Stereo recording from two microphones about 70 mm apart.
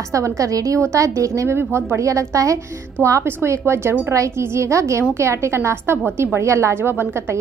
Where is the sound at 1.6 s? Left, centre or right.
Right.